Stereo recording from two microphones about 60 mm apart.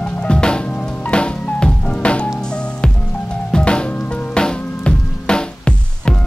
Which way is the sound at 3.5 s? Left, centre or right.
Centre.